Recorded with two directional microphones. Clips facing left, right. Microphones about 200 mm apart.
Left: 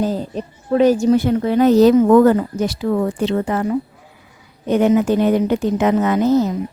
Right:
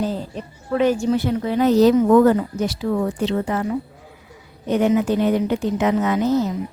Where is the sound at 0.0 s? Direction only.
40° left (ahead or behind).